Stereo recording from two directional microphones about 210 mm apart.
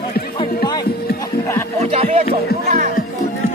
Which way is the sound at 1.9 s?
30° right (ahead or behind).